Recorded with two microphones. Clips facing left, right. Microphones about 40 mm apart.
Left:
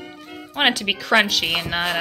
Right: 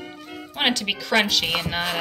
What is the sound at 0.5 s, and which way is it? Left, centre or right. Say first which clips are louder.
Speech: left 3 dB; centre.